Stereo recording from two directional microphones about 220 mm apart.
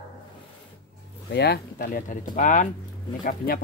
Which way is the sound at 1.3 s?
45° left (ahead or behind).